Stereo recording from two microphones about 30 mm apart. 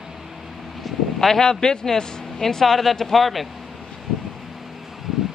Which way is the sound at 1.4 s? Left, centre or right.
Left.